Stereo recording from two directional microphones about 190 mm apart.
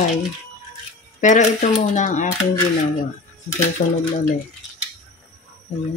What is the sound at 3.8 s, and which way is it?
Speech, 45° left (ahead or behind).